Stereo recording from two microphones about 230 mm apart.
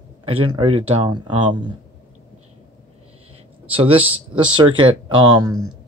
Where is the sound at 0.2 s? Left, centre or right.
Right.